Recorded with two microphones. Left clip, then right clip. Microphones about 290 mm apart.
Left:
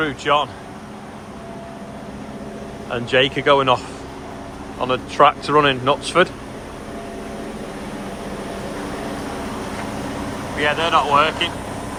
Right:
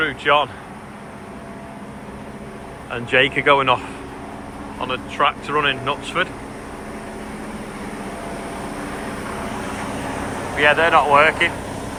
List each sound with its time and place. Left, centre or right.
0.0 s speech: centre
2.9 s speech: centre
4.8 s speech: left
10.6 s speech: centre